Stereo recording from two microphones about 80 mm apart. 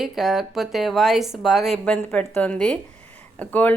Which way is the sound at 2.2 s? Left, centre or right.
Centre.